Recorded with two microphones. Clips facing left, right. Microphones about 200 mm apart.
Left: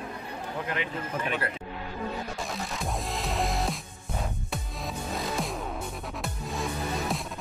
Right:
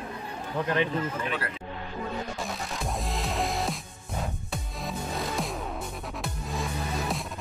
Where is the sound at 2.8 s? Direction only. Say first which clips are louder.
Right 1 dB; centre (ahead or behind).